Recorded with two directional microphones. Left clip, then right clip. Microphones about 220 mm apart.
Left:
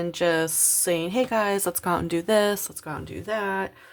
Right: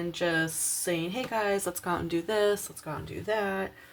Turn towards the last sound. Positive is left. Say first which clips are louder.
# left 3 dB
turn(degrees=40)  # may be behind; listen again after turning